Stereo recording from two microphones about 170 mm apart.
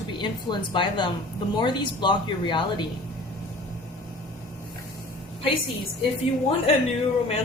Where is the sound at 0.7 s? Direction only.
30° left (ahead or behind).